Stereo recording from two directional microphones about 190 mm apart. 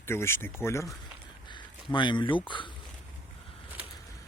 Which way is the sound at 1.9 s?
25° left (ahead or behind).